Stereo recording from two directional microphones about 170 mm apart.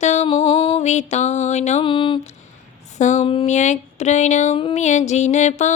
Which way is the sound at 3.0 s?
45° left (ahead or behind).